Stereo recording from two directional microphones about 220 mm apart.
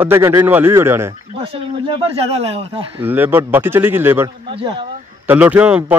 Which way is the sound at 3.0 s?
10° right (ahead or behind).